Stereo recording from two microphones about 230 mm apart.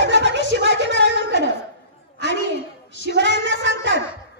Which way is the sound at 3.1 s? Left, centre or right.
Right.